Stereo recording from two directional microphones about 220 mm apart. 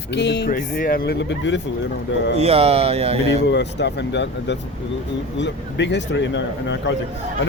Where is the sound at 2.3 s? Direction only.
25° right (ahead or behind).